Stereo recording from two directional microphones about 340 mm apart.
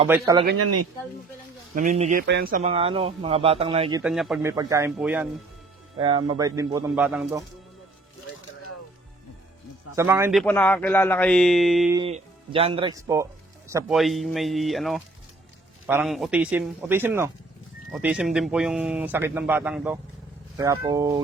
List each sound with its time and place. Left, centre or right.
0.1 s speech: centre
0.5 s speech: right
1.7 s speech: right
4.0 s speech: centre
6.0 s speech: centre
9.9 s speech: centre
10.4 s speech: centre
11.9 s speech: centre